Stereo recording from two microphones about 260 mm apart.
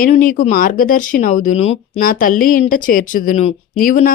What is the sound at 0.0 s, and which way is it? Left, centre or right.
Speech, left.